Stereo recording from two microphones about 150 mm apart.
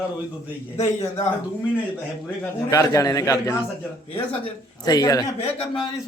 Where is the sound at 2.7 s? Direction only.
20° left (ahead or behind).